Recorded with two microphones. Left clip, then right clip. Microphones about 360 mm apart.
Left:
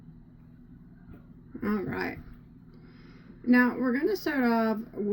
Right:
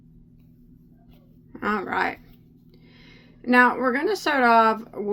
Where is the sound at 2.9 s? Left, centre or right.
Centre.